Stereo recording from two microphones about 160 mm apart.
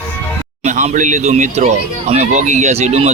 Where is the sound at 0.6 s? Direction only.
45° right (ahead or behind).